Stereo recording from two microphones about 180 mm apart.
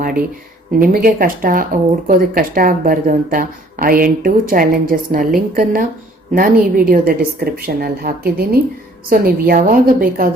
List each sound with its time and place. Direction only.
0.8 s a woman's voice: 50° right (ahead or behind)